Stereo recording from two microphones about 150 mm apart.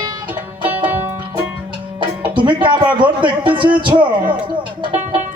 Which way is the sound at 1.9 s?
35° right (ahead or behind).